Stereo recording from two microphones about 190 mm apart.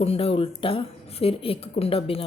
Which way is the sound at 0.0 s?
30° left (ahead or behind).